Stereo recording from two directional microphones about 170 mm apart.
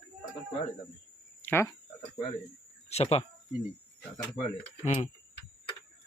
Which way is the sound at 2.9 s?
35° left (ahead or behind).